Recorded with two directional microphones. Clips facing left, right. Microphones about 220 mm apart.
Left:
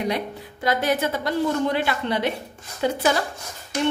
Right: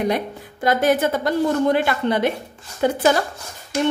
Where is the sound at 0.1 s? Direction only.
50° right (ahead or behind).